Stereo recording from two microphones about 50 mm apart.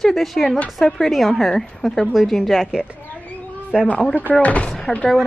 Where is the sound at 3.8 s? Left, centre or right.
Left.